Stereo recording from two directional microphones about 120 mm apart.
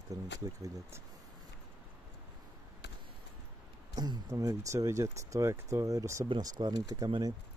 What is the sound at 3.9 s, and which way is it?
Speech, 35° right (ahead or behind).